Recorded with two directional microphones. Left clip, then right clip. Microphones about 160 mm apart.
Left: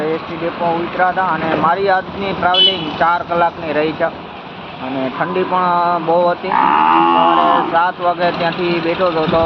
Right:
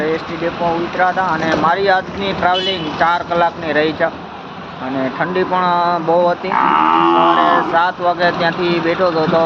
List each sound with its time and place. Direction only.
0.9 s speech: 10° right (ahead or behind)
5.2 s speech: 10° right (ahead or behind)
6.5 s speech: 45° left (ahead or behind)
7.8 s speech: 15° right (ahead or behind)